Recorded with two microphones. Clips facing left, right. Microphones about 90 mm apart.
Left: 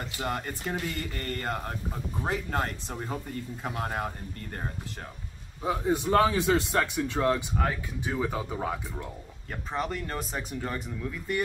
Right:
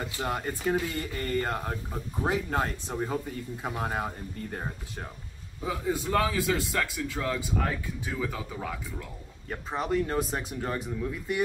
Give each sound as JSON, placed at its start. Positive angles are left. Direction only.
{"t": 0.0, "sound": "speech", "side_deg": -5}
{"t": 5.7, "sound": "a man's voice", "side_deg": 25}
{"t": 9.5, "sound": "speech", "side_deg": -5}